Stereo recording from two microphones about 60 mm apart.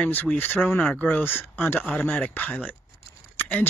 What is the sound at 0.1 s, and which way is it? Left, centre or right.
Speech, left.